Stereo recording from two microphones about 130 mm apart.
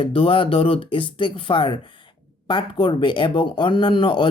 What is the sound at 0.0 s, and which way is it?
Speech, 45° left (ahead or behind).